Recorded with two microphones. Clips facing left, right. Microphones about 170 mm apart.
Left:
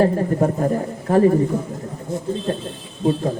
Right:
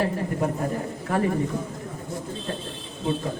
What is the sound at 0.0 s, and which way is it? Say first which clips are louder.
Speech: left 8 dB; 40° left (ahead or behind).